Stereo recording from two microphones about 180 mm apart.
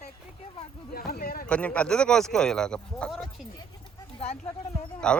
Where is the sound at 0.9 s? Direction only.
55° left (ahead or behind).